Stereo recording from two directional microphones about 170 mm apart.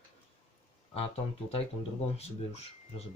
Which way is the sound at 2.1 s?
40° left (ahead or behind).